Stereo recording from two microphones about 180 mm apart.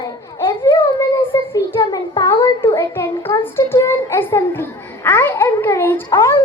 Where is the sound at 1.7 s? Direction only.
20° left (ahead or behind).